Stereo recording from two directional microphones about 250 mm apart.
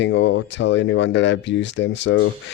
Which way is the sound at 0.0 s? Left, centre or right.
Left.